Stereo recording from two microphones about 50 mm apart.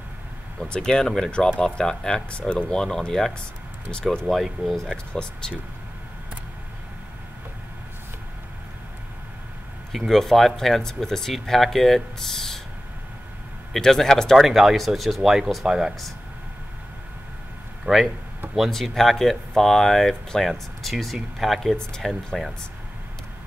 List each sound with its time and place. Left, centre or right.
0.6 s speech: centre
5.1 s speech: centre
9.9 s speech: centre
13.7 s speech: centre
14.4 s speech: centre
17.8 s speech: centre
21.7 s speech: centre